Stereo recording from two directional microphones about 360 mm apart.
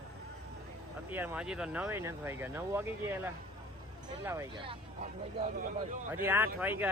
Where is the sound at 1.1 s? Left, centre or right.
Centre.